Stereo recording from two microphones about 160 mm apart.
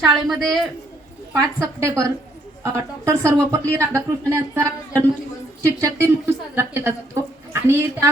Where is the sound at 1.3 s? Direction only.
15° right (ahead or behind).